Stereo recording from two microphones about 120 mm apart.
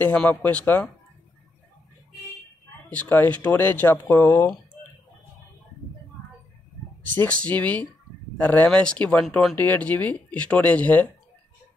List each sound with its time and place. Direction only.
0.0 s speech: 10° left (ahead or behind)
2.9 s speech: 15° left (ahead or behind)
7.2 s speech: 10° left (ahead or behind)
9.6 s speech: 15° left (ahead or behind)